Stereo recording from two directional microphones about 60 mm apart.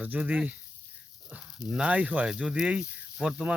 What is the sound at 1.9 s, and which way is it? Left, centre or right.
Speech, right.